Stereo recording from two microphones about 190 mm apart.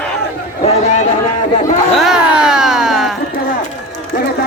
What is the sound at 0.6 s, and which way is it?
Speech, 35° left (ahead or behind).